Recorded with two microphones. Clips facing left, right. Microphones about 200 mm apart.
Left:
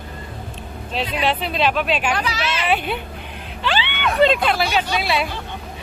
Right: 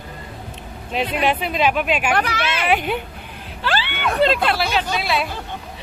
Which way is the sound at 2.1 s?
55° right (ahead or behind).